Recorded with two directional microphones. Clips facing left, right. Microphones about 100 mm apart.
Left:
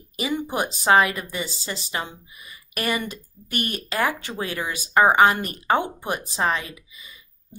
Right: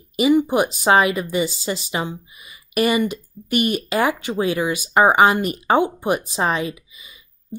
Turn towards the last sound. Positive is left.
turn(degrees=-15)  # may be behind; listen again after turning